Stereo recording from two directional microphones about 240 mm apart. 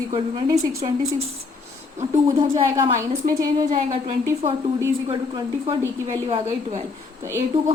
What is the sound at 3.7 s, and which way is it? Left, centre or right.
A woman's voice, right.